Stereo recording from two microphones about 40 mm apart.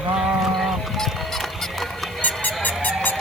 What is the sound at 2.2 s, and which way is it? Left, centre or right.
Goose, left.